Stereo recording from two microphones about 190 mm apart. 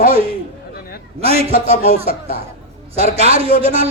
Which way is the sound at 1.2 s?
30° right (ahead or behind).